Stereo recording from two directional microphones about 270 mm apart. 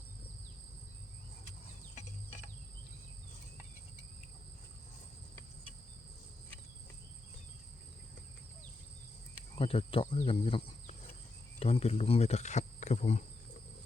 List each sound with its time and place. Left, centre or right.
9.6 s speech: centre